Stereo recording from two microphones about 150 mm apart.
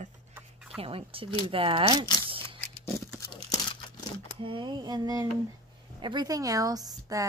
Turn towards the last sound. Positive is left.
turn(degrees=-25)  # may be behind; listen again after turning